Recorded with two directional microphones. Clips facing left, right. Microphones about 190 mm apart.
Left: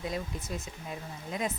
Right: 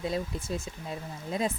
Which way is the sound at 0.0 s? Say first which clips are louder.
Right 4 dB; 30° right (ahead or behind).